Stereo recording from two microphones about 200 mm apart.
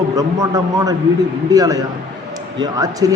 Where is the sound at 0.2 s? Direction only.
15° right (ahead or behind).